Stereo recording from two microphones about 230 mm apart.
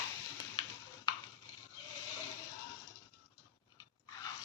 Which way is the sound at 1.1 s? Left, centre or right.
Centre.